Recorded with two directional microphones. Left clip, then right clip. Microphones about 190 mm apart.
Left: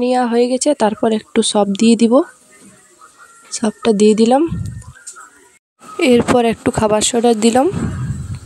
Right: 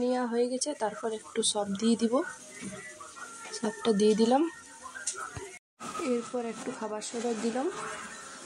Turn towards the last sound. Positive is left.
turn(degrees=60)  # may be behind; listen again after turning